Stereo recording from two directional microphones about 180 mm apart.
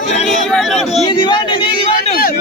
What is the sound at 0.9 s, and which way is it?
Speech, 30° left (ahead or behind).